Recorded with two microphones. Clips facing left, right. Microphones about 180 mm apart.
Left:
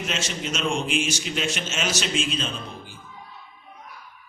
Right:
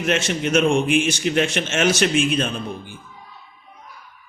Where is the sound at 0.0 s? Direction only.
60° right (ahead or behind).